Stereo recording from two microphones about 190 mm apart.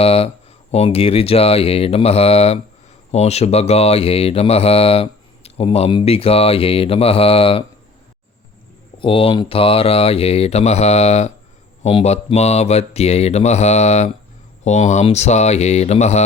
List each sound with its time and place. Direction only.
0.0 s speech: 30° left (ahead or behind)
9.0 s speech: 25° left (ahead or behind)